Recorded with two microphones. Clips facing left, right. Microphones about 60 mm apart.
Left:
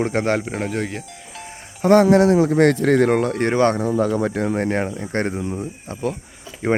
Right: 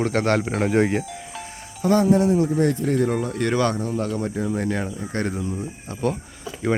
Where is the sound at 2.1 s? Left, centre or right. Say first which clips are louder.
Left 4 dB; left.